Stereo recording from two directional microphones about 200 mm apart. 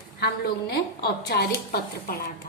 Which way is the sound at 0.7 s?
55° left (ahead or behind).